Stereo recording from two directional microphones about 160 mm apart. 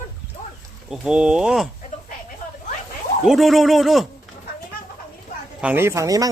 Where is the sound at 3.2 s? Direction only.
Centre (ahead or behind).